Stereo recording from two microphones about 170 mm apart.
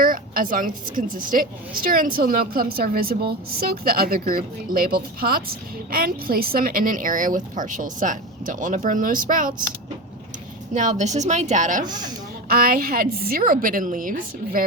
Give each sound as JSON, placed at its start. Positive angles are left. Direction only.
{"t": 0.0, "sound": "a sound", "side_deg": -55}
{"t": 0.9, "sound": "a woman's voice", "side_deg": -50}
{"t": 10.8, "sound": "a woman's voice", "side_deg": -45}
{"t": 11.9, "sound": "speech", "side_deg": -25}
{"t": 12.5, "sound": "a woman's voice", "side_deg": -60}